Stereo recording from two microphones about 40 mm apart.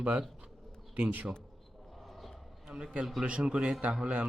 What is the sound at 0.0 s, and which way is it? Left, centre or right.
A man's voice, right.